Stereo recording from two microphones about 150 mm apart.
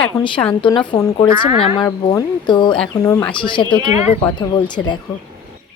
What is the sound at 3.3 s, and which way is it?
Speech, 35° left (ahead or behind).